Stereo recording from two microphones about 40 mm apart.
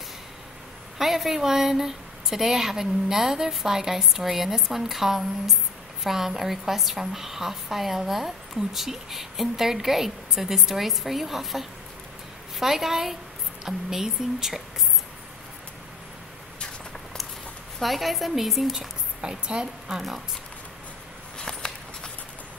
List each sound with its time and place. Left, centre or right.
0.9 s a woman's voice: centre
17.7 s speech: centre
19.2 s a woman's voice: right
21.4 s walk: centre